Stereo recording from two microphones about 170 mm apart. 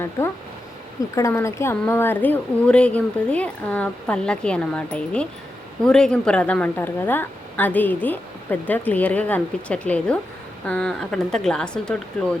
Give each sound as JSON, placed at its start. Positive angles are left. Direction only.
{"t": 1.1, "sound": "a woman's voice", "side_deg": 15}